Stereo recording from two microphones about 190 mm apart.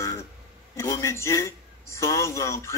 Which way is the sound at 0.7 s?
15° left (ahead or behind).